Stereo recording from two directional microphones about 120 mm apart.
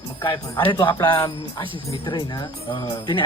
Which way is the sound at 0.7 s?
35° left (ahead or behind).